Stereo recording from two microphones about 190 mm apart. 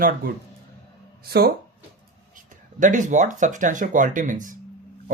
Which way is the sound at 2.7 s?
40° right (ahead or behind).